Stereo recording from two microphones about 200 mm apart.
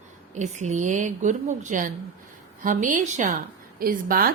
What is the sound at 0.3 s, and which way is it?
A woman's voice, 35° right (ahead or behind).